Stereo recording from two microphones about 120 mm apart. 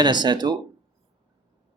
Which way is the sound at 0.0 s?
40° right (ahead or behind).